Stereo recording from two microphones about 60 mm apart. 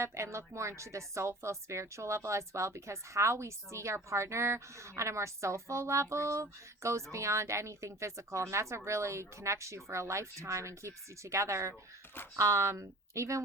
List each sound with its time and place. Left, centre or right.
0.0 s a woman's voice: right